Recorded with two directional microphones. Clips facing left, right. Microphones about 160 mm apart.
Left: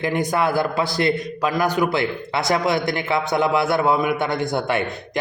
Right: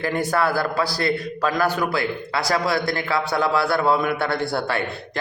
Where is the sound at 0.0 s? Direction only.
15° left (ahead or behind).